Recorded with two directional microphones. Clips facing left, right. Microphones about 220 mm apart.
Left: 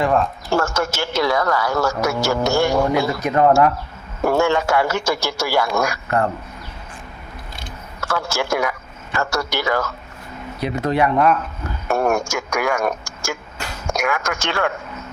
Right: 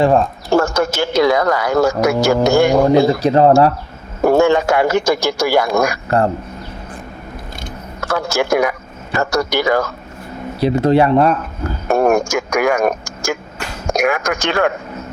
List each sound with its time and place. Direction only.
0.0 s speech: 30° right (ahead or behind)
0.5 s a man's voice: 15° right (ahead or behind)
3.1 s speech: 30° right (ahead or behind)
4.3 s a man's voice: 15° right (ahead or behind)
6.1 s speech: 35° right (ahead or behind)
8.1 s a man's voice: 15° right (ahead or behind)
10.6 s speech: 30° right (ahead or behind)
11.9 s a man's voice: 15° right (ahead or behind)